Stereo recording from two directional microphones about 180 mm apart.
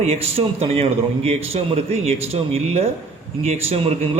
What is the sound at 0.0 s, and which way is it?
A man's voice, 35° right (ahead or behind).